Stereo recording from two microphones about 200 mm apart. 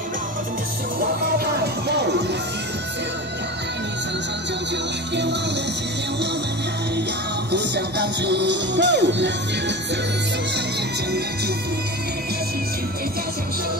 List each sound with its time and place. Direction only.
1.4 s music: 55° right (ahead or behind)
7.5 s music: 55° right (ahead or behind)